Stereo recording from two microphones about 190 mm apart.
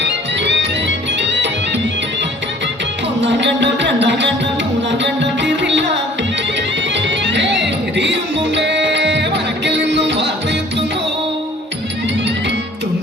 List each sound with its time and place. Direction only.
0.0 s music: 65° right (ahead or behind)
3.2 s music: 70° right (ahead or behind)
6.9 s music: 70° right (ahead or behind)